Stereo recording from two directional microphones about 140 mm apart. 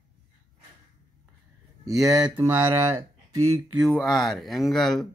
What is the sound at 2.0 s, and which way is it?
Speech, 25° right (ahead or behind).